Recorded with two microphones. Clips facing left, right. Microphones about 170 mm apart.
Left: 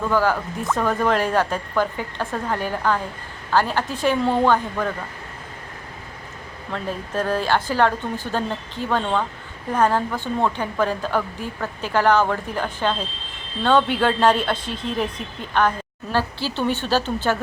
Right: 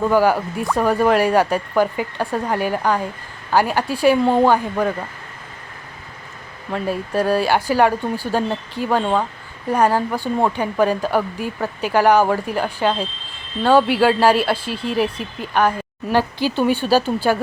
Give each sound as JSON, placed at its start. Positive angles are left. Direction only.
{"t": 0.1, "sound": "speech", "side_deg": -15}
{"t": 6.7, "sound": "speech", "side_deg": -10}